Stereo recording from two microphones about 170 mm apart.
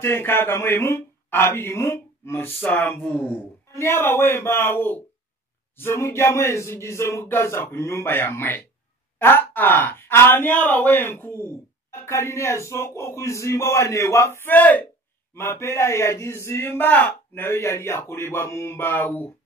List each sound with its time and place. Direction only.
0.0 s speech: 15° left (ahead or behind)